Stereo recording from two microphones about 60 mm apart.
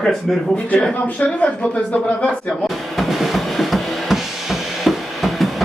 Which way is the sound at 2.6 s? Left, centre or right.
Centre.